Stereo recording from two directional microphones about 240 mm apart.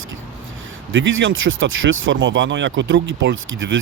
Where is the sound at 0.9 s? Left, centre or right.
Right.